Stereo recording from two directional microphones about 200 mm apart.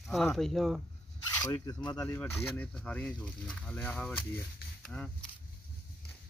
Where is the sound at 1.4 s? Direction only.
15° left (ahead or behind).